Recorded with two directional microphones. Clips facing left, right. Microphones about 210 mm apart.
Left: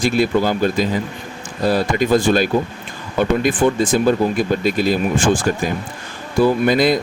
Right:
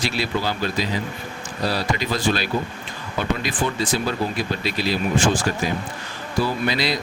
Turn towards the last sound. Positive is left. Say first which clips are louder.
# left 8 dB
turn(degrees=50)  # may be behind; listen again after turning